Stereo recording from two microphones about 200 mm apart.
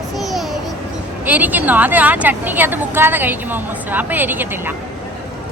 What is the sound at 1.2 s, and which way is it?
A woman's voice, 10° right (ahead or behind).